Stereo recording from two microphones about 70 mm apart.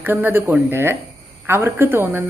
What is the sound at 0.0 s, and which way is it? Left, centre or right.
A woman's voice, right.